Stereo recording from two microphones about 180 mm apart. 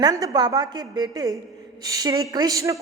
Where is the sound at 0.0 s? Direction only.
20° right (ahead or behind).